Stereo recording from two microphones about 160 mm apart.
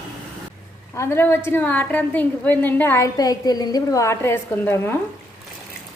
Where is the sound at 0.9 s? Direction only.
15° left (ahead or behind).